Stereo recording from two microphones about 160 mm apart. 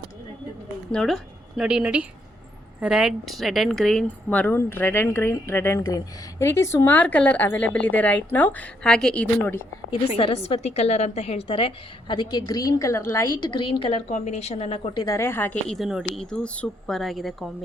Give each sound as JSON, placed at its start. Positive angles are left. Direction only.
{"t": 0.9, "sound": "a woman's voice", "side_deg": 5}
{"t": 10.2, "sound": "a woman's voice", "side_deg": 40}
{"t": 14.9, "sound": "speech", "side_deg": 20}
{"t": 15.7, "sound": "speech", "side_deg": 0}